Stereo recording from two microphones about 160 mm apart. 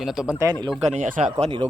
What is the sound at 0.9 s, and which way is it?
Speech, 55° right (ahead or behind).